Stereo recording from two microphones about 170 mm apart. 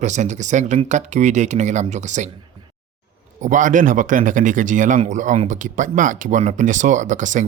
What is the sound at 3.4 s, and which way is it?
Speech, 50° right (ahead or behind).